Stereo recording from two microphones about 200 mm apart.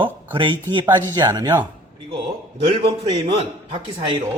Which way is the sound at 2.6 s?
25° right (ahead or behind).